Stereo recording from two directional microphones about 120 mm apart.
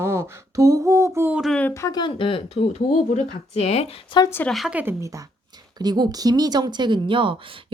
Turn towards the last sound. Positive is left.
turn(degrees=-45)  # may be behind; listen again after turning